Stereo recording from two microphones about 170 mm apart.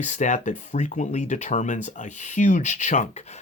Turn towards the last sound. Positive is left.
turn(degrees=45)  # may be behind; listen again after turning